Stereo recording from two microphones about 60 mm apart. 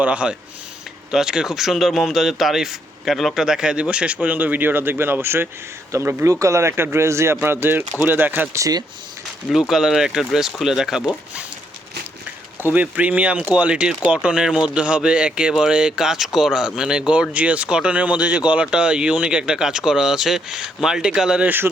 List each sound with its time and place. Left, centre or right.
0.0 s speech: right
1.1 s speech: centre; by 5.5 s right
5.9 s speech: right
9.5 s speech: centre
12.6 s speech: right; by 21.4 s centre
21.4 s speech: right